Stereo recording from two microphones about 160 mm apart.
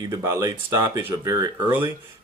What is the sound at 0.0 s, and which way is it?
Speech, 20° right (ahead or behind).